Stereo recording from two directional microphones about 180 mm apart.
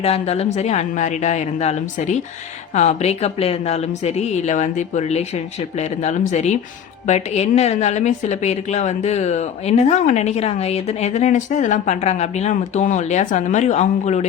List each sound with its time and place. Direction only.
0.0 s a woman's voice: 35° left (ahead or behind)